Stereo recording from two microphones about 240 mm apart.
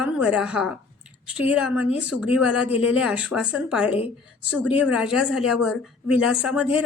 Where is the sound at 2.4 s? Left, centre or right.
Left.